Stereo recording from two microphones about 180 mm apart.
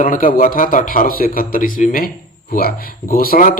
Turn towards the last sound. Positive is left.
turn(degrees=50)  # may be behind; listen again after turning